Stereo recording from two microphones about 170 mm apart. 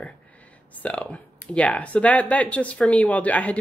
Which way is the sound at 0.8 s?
10° left (ahead or behind).